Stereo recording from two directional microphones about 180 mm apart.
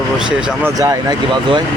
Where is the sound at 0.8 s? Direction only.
20° right (ahead or behind).